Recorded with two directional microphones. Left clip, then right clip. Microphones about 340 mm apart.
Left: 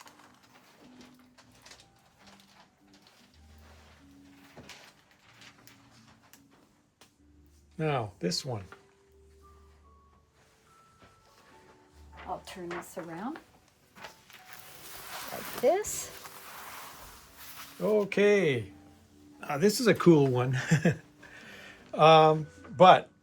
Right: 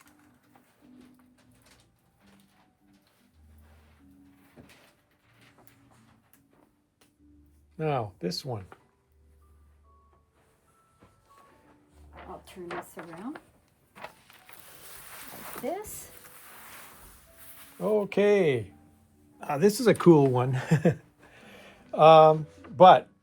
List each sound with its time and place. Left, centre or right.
7.8 s speech: centre
15.6 s speech: left
17.7 s speech: centre
22.4 s a sound: right
22.8 s speech: centre